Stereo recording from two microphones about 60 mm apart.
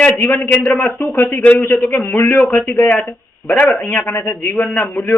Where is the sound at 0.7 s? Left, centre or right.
Left.